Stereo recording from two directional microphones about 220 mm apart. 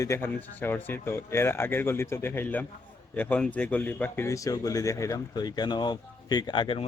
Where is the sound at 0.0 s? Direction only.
10° left (ahead or behind).